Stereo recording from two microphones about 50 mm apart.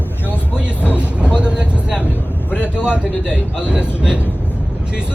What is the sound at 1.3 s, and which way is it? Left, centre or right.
Vehicle, right.